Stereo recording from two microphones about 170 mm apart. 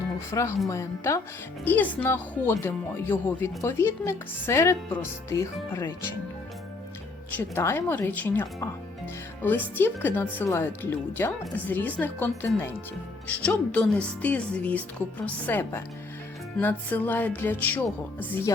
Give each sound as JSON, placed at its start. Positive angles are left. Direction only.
{"t": 0.3, "sound": "speech", "side_deg": 15}
{"t": 7.3, "sound": "speech", "side_deg": 15}